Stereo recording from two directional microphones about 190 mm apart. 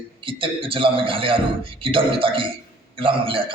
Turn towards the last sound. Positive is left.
turn(degrees=-30)  # may be behind; listen again after turning